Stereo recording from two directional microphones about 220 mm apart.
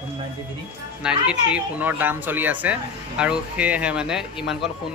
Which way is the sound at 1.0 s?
5° right (ahead or behind).